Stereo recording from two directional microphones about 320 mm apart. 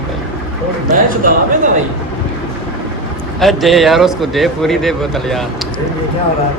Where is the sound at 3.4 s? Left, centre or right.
Centre.